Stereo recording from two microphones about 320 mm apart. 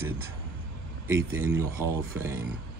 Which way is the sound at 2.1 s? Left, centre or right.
Centre.